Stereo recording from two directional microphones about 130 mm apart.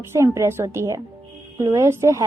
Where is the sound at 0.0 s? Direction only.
20° right (ahead or behind).